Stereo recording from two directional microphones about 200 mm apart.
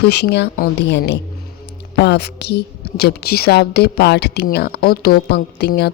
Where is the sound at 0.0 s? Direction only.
55° left (ahead or behind).